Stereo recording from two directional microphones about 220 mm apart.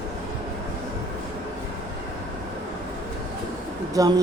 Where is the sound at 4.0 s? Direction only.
15° right (ahead or behind).